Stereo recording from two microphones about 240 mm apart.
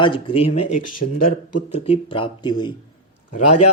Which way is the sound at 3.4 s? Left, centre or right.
Left.